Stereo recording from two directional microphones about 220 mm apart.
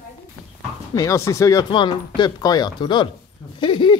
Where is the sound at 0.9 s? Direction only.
15° left (ahead or behind).